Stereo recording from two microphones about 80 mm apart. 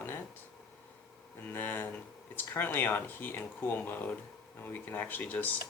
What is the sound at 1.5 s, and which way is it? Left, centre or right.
Speech, left.